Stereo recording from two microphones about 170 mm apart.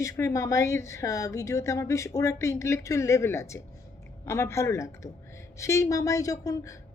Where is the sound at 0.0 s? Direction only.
20° left (ahead or behind).